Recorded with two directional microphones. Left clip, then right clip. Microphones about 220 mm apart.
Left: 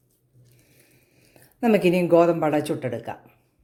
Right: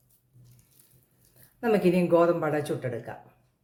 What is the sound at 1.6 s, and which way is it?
Speech, 35° left (ahead or behind).